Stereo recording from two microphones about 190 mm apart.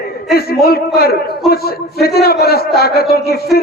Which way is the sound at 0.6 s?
55° left (ahead or behind).